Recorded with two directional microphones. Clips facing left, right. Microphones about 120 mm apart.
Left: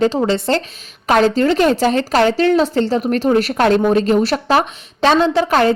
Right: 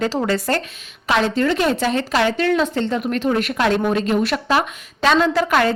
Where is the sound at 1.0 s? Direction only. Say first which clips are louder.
Left 5 dB; 40° left (ahead or behind).